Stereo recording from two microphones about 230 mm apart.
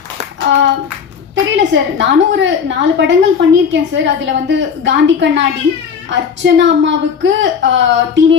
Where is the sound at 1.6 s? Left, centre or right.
Right.